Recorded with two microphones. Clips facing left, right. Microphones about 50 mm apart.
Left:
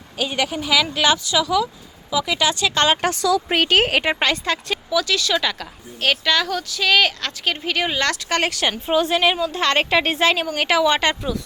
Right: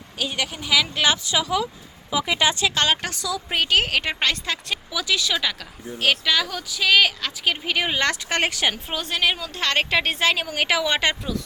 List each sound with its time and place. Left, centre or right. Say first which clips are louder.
0.2 s a woman's voice: left 5 dB; centre; by 2.6 s right
3.2 s speech: left 5 dB; left
3.8 s a woman's voice: left 5 dB; left
4.2 s a woman's voice: left 4 dB; centre
8.9 s a woman's voice: left 6 dB; centre